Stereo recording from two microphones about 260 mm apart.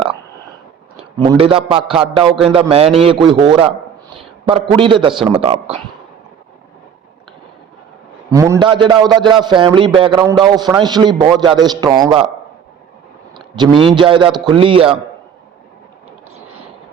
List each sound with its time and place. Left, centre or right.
1.2 s a man's voice: centre
8.3 s a man's voice: centre
13.3 s a man's voice: centre